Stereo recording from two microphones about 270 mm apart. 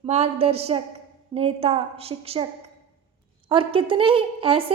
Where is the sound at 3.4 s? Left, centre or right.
Centre.